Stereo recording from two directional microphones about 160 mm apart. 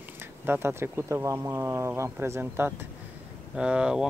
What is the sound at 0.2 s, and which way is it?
Speech, 15° right (ahead or behind).